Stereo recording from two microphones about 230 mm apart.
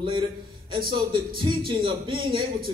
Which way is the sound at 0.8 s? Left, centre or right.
Right.